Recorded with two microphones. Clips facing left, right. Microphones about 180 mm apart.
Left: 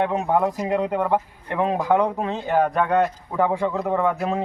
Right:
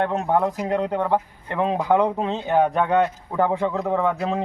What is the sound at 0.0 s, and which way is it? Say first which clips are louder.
Speech: even; 5° left (ahead or behind).